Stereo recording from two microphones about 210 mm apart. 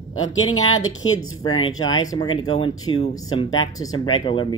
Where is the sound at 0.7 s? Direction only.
75° left (ahead or behind).